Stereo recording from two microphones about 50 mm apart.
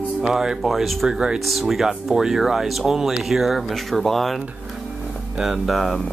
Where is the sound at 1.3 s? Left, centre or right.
Centre.